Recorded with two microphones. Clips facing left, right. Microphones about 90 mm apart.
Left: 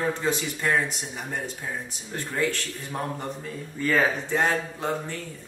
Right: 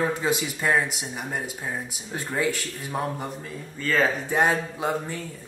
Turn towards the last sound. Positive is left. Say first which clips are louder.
# right 2 dB
turn(degrees=-10)  # may be behind; listen again after turning